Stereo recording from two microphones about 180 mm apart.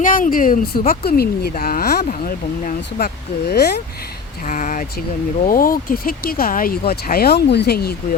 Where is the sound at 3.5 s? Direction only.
65° left (ahead or behind).